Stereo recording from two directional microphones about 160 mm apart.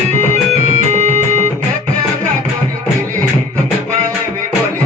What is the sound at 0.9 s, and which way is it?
Music, 45° right (ahead or behind).